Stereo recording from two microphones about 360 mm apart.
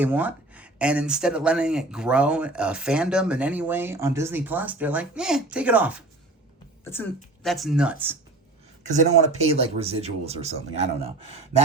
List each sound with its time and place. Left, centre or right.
0.0 s speech: centre
8.9 s speech: centre